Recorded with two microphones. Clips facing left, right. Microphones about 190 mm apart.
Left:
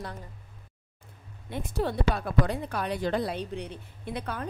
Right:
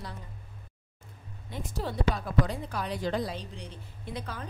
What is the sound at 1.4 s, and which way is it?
A woman's voice, 60° left (ahead or behind).